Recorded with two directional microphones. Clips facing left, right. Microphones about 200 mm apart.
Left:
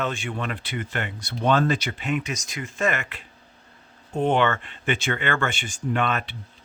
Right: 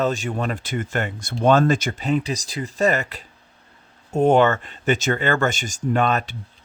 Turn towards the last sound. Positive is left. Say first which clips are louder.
# right 4 dB
turn(degrees=-40)  # may be behind; listen again after turning